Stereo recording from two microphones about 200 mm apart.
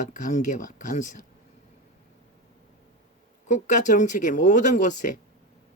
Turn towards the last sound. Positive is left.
turn(degrees=40)  # may be behind; listen again after turning